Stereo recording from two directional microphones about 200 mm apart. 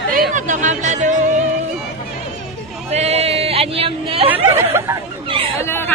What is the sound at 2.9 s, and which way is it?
Speech, 35° right (ahead or behind).